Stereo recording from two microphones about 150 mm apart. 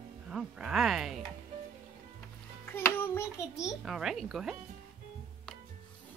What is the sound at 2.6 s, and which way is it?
Child singing, 15° left (ahead or behind).